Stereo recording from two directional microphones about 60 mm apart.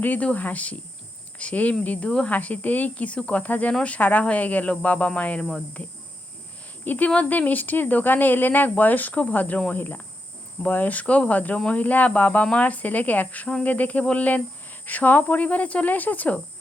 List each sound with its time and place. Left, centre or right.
0.0 s speech: left
6.8 s speech: left